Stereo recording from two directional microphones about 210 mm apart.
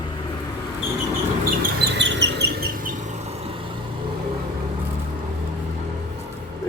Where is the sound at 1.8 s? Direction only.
55° right (ahead or behind); by 3.7 s 25° right (ahead or behind).